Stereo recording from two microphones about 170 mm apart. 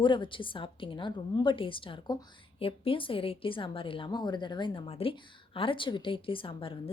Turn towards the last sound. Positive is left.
turn(degrees=30)  # may be behind; listen again after turning